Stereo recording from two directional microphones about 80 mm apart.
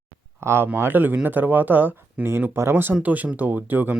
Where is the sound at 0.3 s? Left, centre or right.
Right.